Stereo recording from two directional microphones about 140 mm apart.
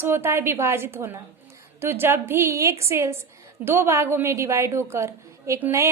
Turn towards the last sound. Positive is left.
turn(degrees=-20)  # may be behind; listen again after turning